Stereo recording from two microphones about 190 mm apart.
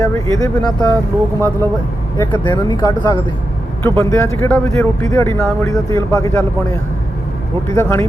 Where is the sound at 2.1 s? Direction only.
25° left (ahead or behind).